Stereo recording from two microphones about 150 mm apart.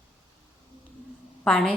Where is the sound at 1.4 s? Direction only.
5° left (ahead or behind).